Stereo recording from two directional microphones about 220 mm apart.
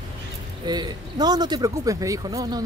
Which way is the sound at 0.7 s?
20° right (ahead or behind).